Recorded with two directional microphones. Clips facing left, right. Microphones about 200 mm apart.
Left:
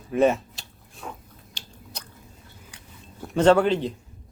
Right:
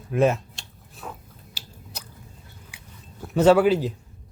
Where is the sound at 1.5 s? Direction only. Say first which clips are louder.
Even; 5° right (ahead or behind).